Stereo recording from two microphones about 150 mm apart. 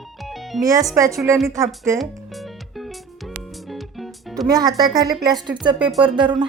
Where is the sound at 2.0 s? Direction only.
Centre (ahead or behind).